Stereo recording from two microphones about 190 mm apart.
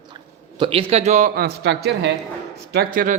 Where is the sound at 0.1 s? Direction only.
25° right (ahead or behind).